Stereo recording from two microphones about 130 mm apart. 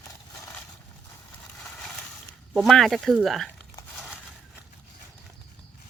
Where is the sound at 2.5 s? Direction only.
Centre (ahead or behind).